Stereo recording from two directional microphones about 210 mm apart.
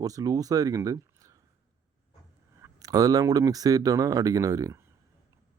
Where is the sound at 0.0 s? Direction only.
15° right (ahead or behind).